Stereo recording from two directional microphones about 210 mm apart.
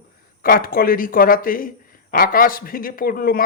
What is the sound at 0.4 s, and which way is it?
Speech, 40° left (ahead or behind).